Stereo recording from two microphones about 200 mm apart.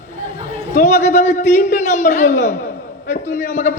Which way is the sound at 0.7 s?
35° left (ahead or behind).